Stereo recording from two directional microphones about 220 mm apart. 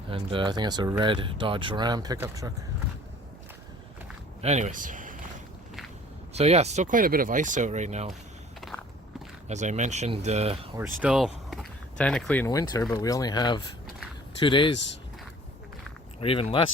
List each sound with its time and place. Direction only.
0.1 s speech: 25° right (ahead or behind)
4.4 s speech: 30° right (ahead or behind)
6.3 s speech: 30° right (ahead or behind)
9.5 s speech: 35° right (ahead or behind)
10.8 s speech: 5° right (ahead or behind)
12.5 s speech: 15° left (ahead or behind)
16.2 s speech: 25° left (ahead or behind)